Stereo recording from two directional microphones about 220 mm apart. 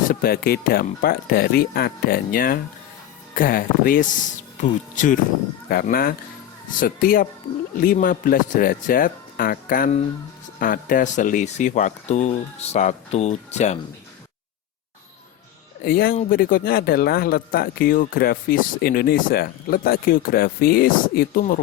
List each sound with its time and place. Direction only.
0.1 s speech: 45° left (ahead or behind)
15.8 s speech: 45° left (ahead or behind)